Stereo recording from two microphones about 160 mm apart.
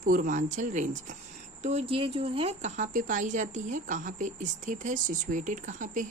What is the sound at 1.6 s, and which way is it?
Speech, 40° right (ahead or behind).